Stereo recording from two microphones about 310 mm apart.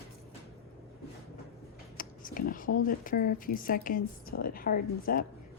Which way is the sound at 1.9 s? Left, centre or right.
Left.